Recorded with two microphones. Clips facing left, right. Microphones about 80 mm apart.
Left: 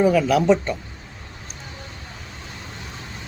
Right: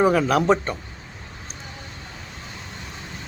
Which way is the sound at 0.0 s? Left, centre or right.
Right.